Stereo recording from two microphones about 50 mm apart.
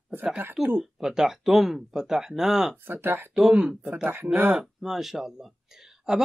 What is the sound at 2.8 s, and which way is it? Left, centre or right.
Speech, right.